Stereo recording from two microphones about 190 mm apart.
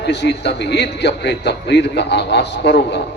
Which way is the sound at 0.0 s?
65° left (ahead or behind).